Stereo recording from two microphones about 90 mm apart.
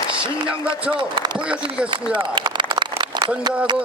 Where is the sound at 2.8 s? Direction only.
55° right (ahead or behind).